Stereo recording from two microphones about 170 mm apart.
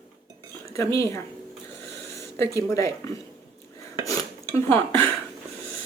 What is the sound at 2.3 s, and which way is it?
Speech, 15° left (ahead or behind).